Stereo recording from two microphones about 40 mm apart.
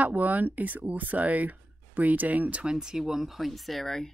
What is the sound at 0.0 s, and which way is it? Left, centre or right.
Speech, right.